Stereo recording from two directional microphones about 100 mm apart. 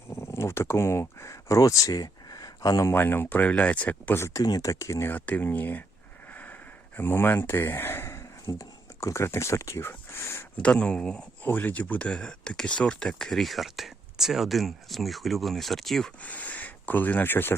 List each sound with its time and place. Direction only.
0.1 s speech: 30° left (ahead or behind)
2.9 s speech: 20° left (ahead or behind)
4.4 s speech: 35° left (ahead or behind); by 5.8 s 20° left (ahead or behind)
6.9 s speech: 20° left (ahead or behind)
10.6 s speech: 10° left (ahead or behind)
16.2 s speech: 15° left (ahead or behind)